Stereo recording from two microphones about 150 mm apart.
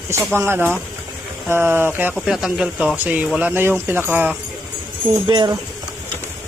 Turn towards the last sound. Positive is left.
turn(degrees=-30)  # may be behind; listen again after turning